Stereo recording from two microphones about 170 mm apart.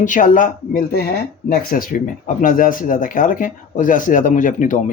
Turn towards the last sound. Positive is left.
turn(degrees=50)  # may be behind; listen again after turning